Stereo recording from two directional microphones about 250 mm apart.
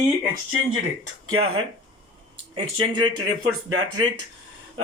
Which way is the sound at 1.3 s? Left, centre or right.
Right.